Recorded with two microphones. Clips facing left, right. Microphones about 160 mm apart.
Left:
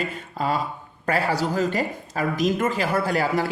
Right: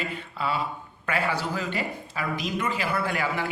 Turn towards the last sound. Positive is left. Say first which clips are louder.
# left 5 dB
turn(degrees=40)  # may be behind; listen again after turning